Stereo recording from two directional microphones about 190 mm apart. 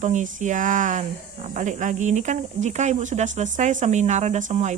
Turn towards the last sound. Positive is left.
turn(degrees=-40)  # may be behind; listen again after turning